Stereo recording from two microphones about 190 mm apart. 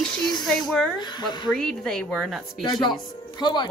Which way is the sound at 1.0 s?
25° left (ahead or behind).